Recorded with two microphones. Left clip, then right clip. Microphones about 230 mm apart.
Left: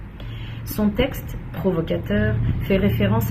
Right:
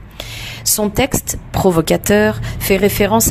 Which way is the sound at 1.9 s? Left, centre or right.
Right.